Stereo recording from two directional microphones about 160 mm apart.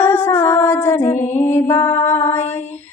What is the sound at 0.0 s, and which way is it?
Music, 15° left (ahead or behind).